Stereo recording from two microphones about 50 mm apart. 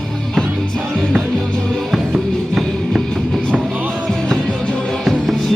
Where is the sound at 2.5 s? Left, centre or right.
Centre.